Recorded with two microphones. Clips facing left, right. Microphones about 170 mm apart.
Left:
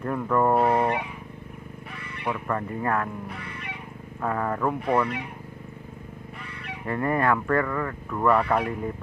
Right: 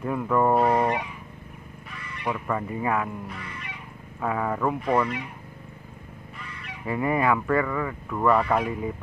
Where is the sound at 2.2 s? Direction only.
Centre (ahead or behind).